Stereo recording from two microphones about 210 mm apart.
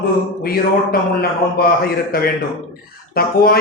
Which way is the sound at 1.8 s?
45° left (ahead or behind).